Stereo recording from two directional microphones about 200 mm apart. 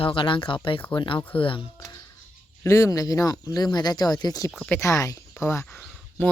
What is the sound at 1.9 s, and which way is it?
Music, 15° left (ahead or behind).